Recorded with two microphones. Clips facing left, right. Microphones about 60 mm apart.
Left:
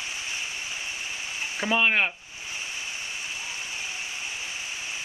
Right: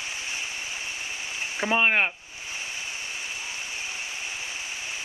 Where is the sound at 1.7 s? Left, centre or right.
Right.